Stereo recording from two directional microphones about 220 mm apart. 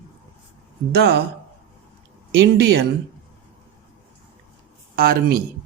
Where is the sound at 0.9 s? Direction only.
45° right (ahead or behind).